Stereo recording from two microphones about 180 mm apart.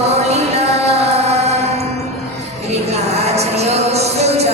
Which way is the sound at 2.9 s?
35° right (ahead or behind).